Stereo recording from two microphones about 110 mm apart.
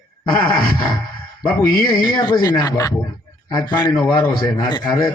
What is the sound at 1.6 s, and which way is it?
Speech, 35° left (ahead or behind).